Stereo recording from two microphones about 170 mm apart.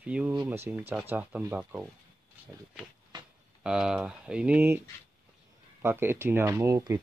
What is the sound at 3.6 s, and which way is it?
Speech, 5° right (ahead or behind).